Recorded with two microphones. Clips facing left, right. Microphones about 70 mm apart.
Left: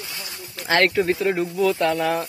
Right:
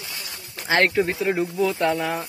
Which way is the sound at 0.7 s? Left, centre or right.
Centre.